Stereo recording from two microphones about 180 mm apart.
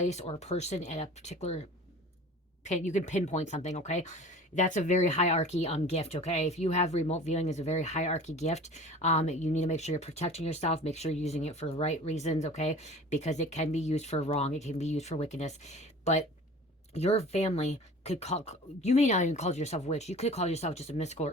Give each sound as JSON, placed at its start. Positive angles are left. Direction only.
{"t": 0.0, "sound": "speech", "side_deg": 40}
{"t": 2.6, "sound": "speech", "side_deg": 40}